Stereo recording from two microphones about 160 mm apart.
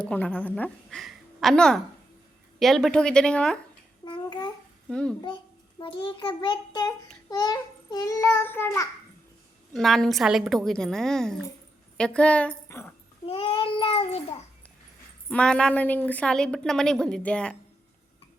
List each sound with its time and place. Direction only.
0.0 s a woman's voice: 10° left (ahead or behind)
4.0 s a sound: 25° left (ahead or behind)
4.9 s a woman's voice: 5° left (ahead or behind)
5.8 s a child's voice: 30° left (ahead or behind); by 8.9 s 15° left (ahead or behind)
9.7 s a woman's voice: centre (ahead or behind)
13.2 s child singing: 35° left (ahead or behind)
15.3 s a woman's voice: 5° left (ahead or behind)